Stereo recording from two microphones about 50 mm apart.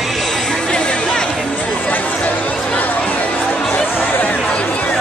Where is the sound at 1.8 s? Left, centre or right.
Left.